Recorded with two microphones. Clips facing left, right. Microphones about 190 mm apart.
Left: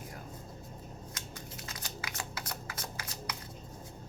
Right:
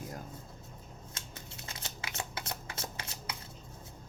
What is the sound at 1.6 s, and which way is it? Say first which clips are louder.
Shuffling cards: right 1 dB; 25° right (ahead or behind).